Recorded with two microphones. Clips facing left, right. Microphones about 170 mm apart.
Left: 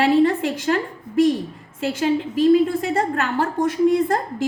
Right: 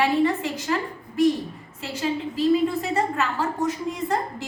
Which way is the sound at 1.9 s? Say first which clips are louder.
Left 5 dB; 80° left.